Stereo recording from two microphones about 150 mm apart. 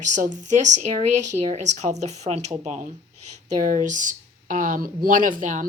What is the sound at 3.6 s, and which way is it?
Speech, 60° right (ahead or behind).